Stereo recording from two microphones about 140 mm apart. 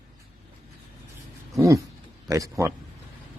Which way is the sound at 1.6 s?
20° right (ahead or behind).